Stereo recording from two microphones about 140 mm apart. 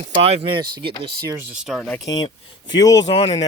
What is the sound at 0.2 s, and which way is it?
Speech, 45° right (ahead or behind).